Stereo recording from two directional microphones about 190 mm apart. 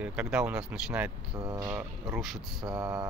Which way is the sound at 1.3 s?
25° right (ahead or behind).